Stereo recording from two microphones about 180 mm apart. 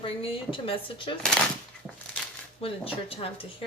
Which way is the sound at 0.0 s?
30° left (ahead or behind).